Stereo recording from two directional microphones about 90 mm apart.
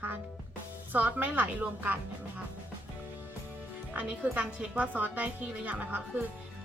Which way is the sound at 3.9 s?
15° right (ahead or behind).